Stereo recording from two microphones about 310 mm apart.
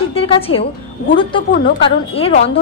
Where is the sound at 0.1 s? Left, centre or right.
Centre.